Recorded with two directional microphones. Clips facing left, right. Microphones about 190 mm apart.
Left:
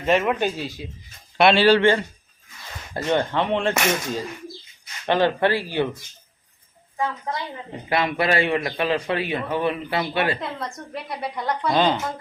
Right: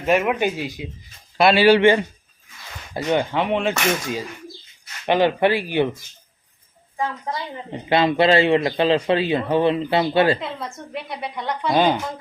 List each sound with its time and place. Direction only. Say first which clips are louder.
0.0 s speech: right 1 dB; 10° right (ahead or behind)
1.4 s a woman's voice: right 1 dB; centre (ahead or behind)
1.6 s speech: right 2 dB; 15° right (ahead or behind)
7.7 s a man's voice: right 5 dB; 25° right (ahead or behind)
10.4 s a woman's voice: even; centre (ahead or behind)
11.7 s speech: right 2 dB; 10° right (ahead or behind)